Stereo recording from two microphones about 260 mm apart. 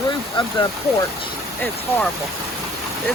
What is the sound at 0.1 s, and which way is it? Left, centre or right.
Speech, centre.